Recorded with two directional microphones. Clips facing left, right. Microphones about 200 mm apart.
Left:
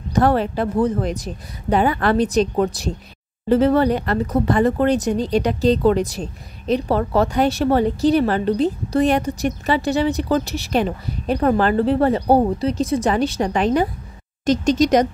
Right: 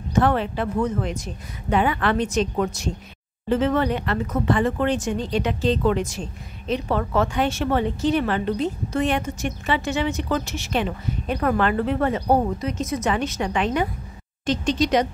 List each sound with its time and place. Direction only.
0.1 s speech: 40° left (ahead or behind)